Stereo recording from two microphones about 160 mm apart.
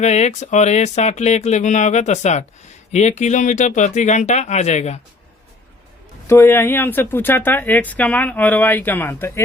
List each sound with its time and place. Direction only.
0.0 s speech: 45° left (ahead or behind)
6.2 s speech: 15° left (ahead or behind)